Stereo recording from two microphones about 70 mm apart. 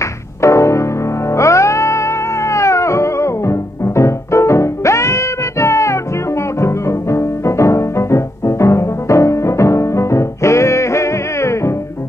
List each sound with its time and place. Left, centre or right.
0.4 s music: left